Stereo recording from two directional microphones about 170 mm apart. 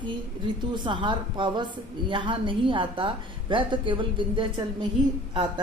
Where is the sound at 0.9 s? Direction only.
30° right (ahead or behind).